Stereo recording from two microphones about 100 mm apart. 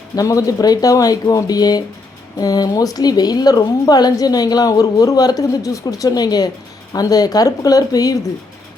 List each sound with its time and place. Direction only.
0.2 s a woman's voice: 35° left (ahead or behind)